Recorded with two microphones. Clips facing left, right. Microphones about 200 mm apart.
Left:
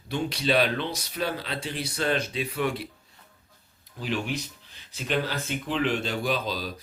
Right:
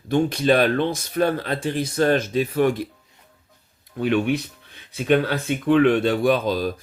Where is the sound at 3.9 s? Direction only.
60° right (ahead or behind).